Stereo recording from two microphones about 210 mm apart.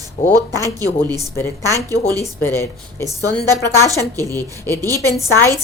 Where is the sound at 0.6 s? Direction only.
15° left (ahead or behind).